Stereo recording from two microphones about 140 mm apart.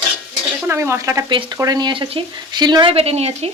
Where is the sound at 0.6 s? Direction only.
20° right (ahead or behind).